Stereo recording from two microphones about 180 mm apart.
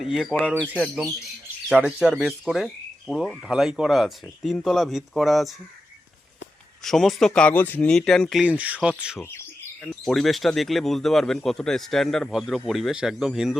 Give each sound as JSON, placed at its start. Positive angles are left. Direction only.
{"t": 0.0, "sound": "speech", "side_deg": 0}
{"t": 0.5, "sound": "speech", "side_deg": -10}
{"t": 2.0, "sound": "speech", "side_deg": -5}
{"t": 6.8, "sound": "speech", "side_deg": 0}